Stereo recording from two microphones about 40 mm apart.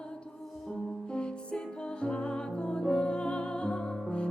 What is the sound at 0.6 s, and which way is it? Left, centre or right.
Music, left.